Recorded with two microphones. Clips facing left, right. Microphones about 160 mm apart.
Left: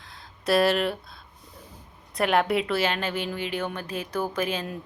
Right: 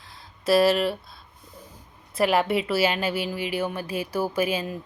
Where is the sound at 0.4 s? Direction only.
Centre (ahead or behind).